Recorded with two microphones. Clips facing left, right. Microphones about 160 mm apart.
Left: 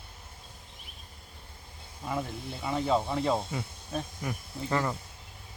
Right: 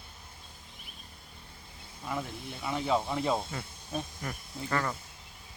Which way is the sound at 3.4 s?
10° left (ahead or behind).